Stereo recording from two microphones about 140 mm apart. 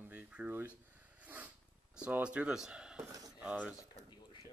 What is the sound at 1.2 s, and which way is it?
Snort, 10° right (ahead or behind).